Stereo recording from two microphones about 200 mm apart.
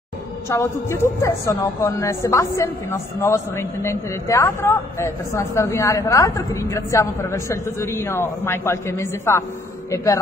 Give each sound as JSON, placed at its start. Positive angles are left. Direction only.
{"t": 0.5, "sound": "a man's voice", "side_deg": 10}